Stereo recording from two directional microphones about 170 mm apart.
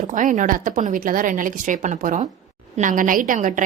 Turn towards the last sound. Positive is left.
turn(degrees=-50)  # may be behind; listen again after turning